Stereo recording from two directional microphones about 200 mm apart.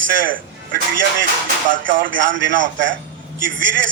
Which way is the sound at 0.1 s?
70° right (ahead or behind).